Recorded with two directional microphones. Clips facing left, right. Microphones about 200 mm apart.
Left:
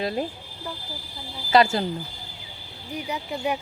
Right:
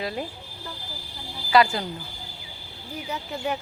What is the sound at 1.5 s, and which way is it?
Speech, 25° left (ahead or behind).